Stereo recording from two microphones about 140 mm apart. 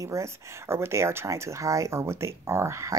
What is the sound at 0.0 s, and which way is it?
Speech, 20° right (ahead or behind).